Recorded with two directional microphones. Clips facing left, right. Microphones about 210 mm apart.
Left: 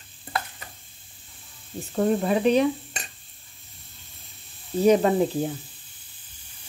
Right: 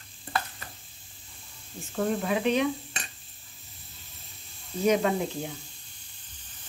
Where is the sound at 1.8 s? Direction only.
35° left (ahead or behind).